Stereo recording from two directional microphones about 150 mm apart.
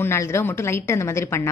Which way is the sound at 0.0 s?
15° left (ahead or behind).